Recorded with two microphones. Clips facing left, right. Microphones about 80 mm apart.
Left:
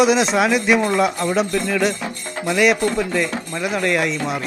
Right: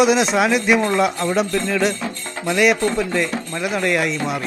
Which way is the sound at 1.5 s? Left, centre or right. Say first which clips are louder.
Even; centre.